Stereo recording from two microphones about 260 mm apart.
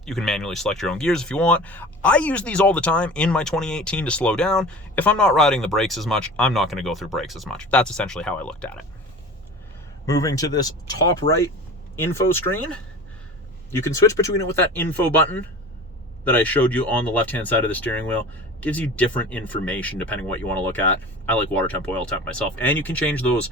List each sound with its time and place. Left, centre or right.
0.0 s speech: centre
10.1 s speech: centre